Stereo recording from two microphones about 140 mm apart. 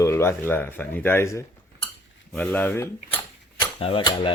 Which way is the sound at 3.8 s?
40° left (ahead or behind).